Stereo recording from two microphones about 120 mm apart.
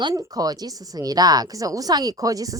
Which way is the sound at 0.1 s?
30° right (ahead or behind).